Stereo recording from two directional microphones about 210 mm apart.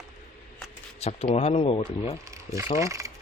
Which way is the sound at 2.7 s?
15° right (ahead or behind).